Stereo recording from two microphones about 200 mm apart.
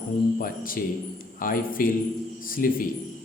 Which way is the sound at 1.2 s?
45° left (ahead or behind).